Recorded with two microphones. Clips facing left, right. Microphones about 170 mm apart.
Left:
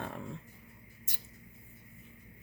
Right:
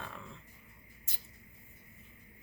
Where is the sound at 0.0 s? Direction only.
50° left (ahead or behind).